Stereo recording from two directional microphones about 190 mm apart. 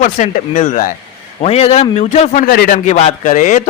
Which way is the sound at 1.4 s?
30° left (ahead or behind).